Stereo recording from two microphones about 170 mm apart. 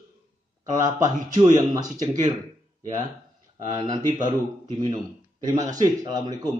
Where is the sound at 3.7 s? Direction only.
25° right (ahead or behind).